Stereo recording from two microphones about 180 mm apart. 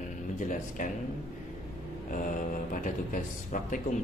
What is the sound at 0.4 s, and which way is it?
Speech, 45° left (ahead or behind).